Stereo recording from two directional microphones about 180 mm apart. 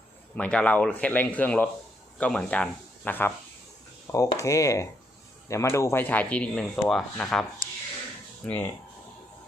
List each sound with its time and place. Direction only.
0.3 s speech: 5° left (ahead or behind)
8.4 s speech: 10° left (ahead or behind)